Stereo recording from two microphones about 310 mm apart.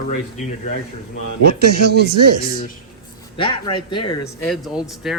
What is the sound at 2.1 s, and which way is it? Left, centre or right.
Speech, right.